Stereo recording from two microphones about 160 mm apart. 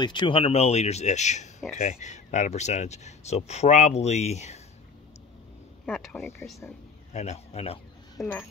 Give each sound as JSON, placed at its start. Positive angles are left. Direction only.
{"t": 0.0, "sound": "speech", "side_deg": 30}
{"t": 5.9, "sound": "speech", "side_deg": 0}
{"t": 6.4, "sound": "speech", "side_deg": 15}
{"t": 7.1, "sound": "speech", "side_deg": 45}
{"t": 8.2, "sound": "speech", "side_deg": 0}